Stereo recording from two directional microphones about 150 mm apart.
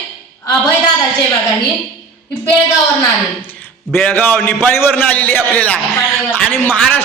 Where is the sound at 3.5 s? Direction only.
10° left (ahead or behind).